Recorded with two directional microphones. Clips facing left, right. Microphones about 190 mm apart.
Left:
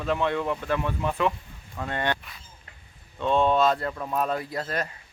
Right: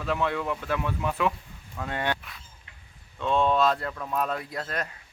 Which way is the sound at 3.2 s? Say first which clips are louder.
Left 2 dB; centre (ahead or behind).